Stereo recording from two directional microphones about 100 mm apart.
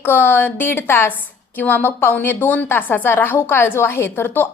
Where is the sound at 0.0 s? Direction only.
20° left (ahead or behind).